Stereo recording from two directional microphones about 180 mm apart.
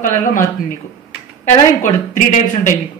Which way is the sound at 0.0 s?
50° left (ahead or behind).